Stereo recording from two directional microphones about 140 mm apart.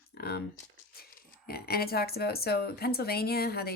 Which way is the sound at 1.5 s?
90° left.